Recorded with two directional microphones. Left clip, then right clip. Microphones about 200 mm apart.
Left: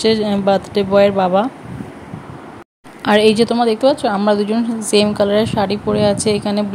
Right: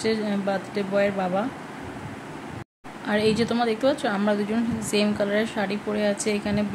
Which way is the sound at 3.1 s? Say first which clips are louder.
Left 11 dB; 30° left (ahead or behind).